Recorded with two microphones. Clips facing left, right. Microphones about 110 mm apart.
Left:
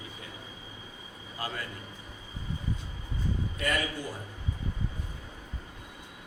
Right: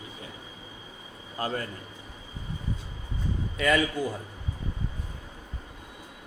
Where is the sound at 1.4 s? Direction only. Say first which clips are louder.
Right 6 dB; 40° right (ahead or behind).